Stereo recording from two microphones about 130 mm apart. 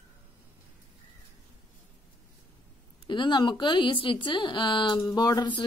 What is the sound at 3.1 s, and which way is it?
Speech, 35° left (ahead or behind).